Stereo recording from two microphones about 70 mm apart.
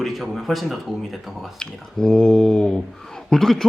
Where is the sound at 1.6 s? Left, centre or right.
Centre.